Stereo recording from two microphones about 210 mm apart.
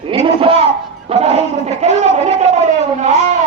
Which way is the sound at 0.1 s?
25° right (ahead or behind).